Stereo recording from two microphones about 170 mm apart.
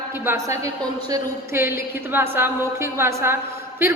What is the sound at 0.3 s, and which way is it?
A woman's voice, 20° right (ahead or behind).